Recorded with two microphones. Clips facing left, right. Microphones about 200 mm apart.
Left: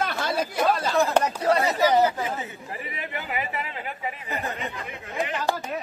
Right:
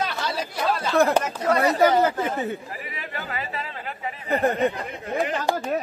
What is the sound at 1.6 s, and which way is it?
Speech, 55° right (ahead or behind).